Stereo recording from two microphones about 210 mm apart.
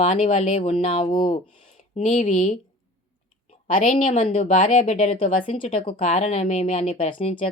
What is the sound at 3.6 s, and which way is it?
Speech, 35° left (ahead or behind).